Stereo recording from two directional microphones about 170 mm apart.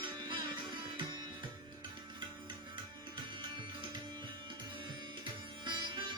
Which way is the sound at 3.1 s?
30° right (ahead or behind).